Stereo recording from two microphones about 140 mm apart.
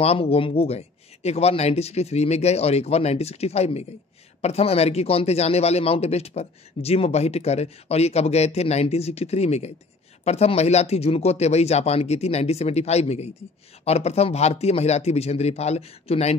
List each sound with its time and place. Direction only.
0.0 s a man's voice: 45° left (ahead or behind)